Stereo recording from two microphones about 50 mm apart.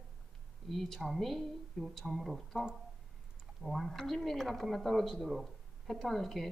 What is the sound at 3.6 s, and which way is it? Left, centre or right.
A woman's voice, centre.